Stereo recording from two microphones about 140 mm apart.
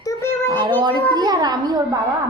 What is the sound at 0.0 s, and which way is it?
Child singing, 20° left (ahead or behind).